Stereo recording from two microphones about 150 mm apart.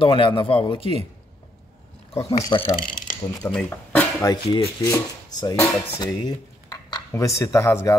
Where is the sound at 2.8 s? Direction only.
65° left (ahead or behind).